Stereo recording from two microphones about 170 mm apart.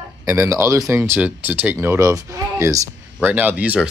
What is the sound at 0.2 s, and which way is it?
Speech, 20° right (ahead or behind).